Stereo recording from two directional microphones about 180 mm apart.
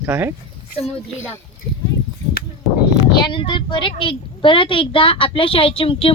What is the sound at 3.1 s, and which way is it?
A woman's voice, 25° left (ahead or behind).